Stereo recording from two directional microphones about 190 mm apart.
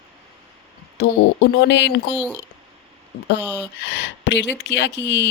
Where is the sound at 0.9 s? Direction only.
60° left (ahead or behind).